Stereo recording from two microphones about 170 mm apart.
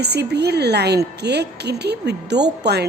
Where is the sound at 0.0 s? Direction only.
75° right (ahead or behind).